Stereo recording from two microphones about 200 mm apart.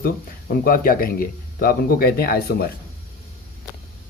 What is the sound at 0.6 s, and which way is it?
Speech, 45° left (ahead or behind).